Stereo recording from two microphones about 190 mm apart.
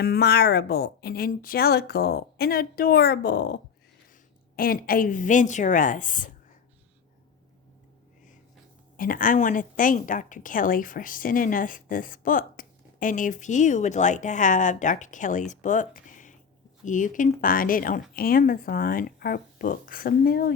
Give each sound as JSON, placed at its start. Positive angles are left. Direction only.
{"t": 0.0, "sound": "a woman's voice", "side_deg": 55}
{"t": 4.5, "sound": "speech", "side_deg": 50}
{"t": 9.0, "sound": "speech", "side_deg": 45}